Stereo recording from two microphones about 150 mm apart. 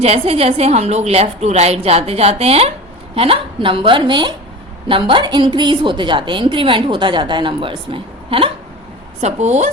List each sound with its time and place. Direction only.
0.0 s a woman's voice: 40° right (ahead or behind)
9.2 s a woman's voice: 50° right (ahead or behind)